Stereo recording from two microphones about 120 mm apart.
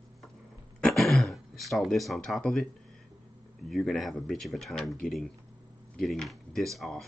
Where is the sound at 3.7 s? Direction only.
Centre (ahead or behind).